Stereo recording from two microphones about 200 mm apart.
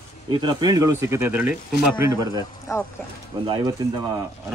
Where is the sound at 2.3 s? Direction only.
15° left (ahead or behind).